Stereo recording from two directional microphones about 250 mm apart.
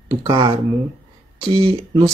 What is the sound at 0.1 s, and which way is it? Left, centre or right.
Speech, centre.